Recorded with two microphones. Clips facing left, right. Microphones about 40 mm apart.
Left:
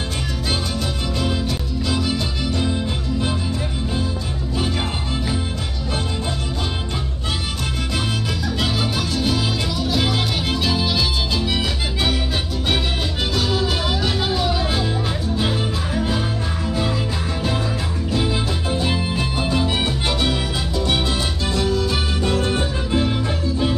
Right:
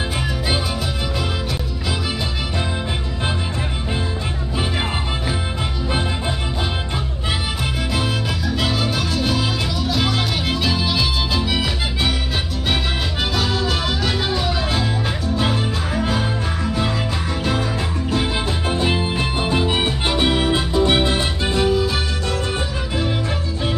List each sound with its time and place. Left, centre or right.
8.5 s music: centre
13.3 s music: centre
16.0 s music: centre
18.1 s music: right